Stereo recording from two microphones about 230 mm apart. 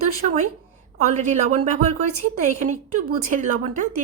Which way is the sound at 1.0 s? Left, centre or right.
Right.